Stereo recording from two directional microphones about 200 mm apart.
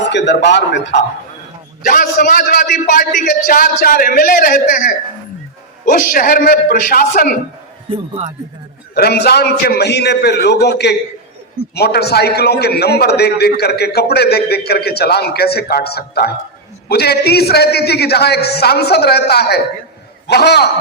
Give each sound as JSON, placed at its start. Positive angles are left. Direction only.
{"t": 0.1, "sound": "a man's voice", "side_deg": 60}
{"t": 1.9, "sound": "a man's voice", "side_deg": 40}
{"t": 7.9, "sound": "a man's voice", "side_deg": -30}
{"t": 9.0, "sound": "a man's voice", "side_deg": 55}